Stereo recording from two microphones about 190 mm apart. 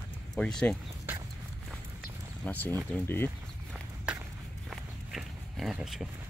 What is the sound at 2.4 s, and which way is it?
Speech, 10° left (ahead or behind).